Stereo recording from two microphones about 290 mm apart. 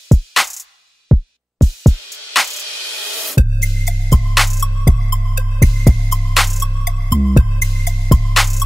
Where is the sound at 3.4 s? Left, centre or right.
Left.